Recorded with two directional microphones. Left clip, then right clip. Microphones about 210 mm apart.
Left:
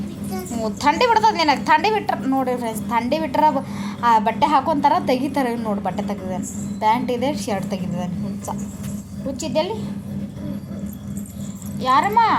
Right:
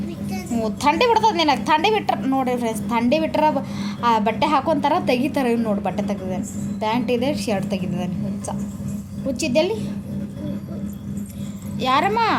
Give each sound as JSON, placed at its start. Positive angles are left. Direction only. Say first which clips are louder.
{"t": 0.5, "sound": "a woman's voice", "louder": "even", "side_deg": -15}
{"t": 9.4, "sound": "a woman's voice", "louder": "right 2 dB", "side_deg": -20}
{"t": 11.8, "sound": "speech", "louder": "left 3 dB", "side_deg": -25}